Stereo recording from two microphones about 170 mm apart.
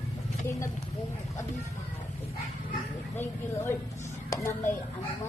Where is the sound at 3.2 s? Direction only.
15° left (ahead or behind).